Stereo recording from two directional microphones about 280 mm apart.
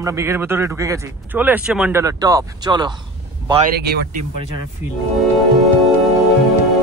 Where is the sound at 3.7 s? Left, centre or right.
Right.